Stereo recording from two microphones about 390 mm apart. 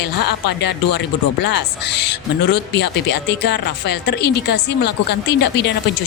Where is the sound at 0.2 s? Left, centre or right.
Left.